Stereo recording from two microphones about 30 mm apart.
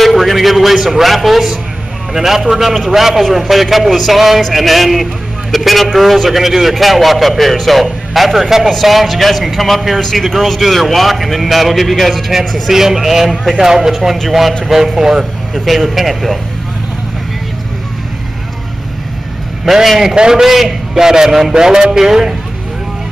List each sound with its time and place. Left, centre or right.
0.0 s a man's voice: centre
3.3 s a man's voice: centre
9.9 s a man's voice: centre
12.6 s speech: centre
13.3 s a man's voice: centre
13.6 s speech: centre
15.6 s a man's voice: centre
19.6 s speech: centre
20.9 s speech: centre